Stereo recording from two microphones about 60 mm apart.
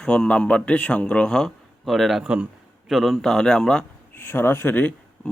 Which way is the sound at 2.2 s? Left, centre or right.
Centre.